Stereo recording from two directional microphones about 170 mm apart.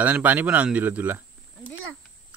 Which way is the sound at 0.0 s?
10° right (ahead or behind).